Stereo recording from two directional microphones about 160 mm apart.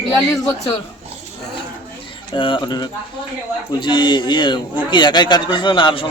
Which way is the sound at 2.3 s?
30° left (ahead or behind).